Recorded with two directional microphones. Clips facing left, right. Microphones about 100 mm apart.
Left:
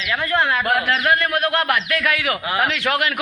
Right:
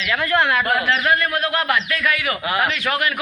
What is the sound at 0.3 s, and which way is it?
Speech, 20° left (ahead or behind).